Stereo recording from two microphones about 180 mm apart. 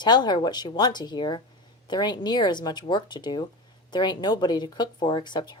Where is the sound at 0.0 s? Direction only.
25° left (ahead or behind).